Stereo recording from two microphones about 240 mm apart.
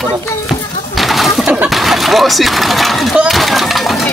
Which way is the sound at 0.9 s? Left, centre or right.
Centre.